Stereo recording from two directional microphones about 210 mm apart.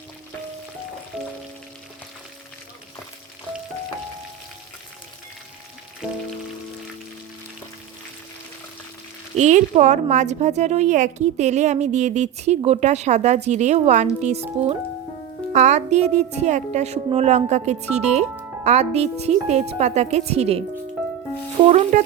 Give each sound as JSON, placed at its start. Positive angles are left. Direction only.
{"t": 9.3, "sound": "a woman's voice", "side_deg": -35}
{"t": 21.7, "sound": "a woman's voice", "side_deg": -35}